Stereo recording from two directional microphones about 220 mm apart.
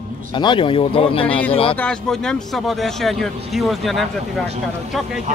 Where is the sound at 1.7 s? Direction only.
5° left (ahead or behind).